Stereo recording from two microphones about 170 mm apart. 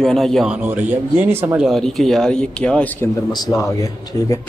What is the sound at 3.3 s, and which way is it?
Speech, 20° left (ahead or behind).